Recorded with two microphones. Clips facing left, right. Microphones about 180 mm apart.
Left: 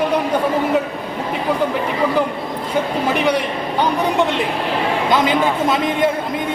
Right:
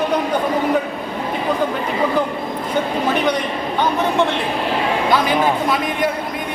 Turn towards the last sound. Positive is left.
turn(degrees=25)  # may be behind; listen again after turning